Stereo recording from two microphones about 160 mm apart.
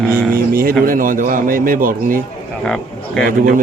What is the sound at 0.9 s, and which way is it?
A man's voice, 60° right (ahead or behind).